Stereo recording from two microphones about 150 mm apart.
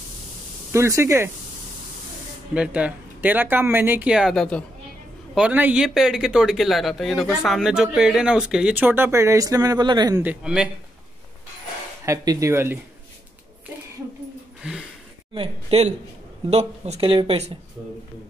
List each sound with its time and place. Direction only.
0.7 s speech: 20° right (ahead or behind)
2.5 s speech: 10° right (ahead or behind)
5.3 s speech: 10° right (ahead or behind); by 10.2 s 25° right (ahead or behind)
10.2 s speech: 5° right (ahead or behind)
12.1 s speech: 20° right (ahead or behind)
15.3 s a man's voice: 40° right (ahead or behind)